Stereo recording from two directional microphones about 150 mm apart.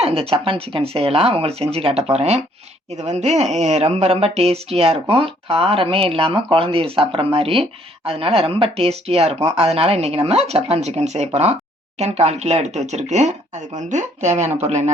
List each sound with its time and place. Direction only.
0.0 s speech: 40° right (ahead or behind)